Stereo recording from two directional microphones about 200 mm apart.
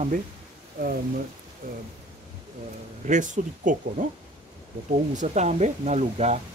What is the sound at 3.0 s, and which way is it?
Speech, 40° right (ahead or behind).